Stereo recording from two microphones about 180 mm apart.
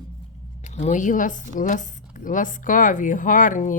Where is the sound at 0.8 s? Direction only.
45° left (ahead or behind).